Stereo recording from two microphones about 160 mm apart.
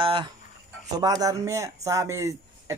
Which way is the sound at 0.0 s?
30° right (ahead or behind).